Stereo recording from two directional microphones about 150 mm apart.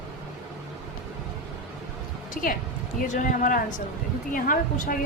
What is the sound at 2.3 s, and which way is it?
A woman's voice, 65° left (ahead or behind).